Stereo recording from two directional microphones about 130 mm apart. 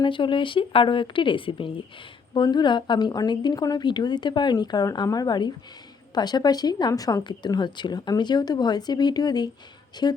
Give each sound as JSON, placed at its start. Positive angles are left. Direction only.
{"t": 0.0, "sound": "speech", "side_deg": 40}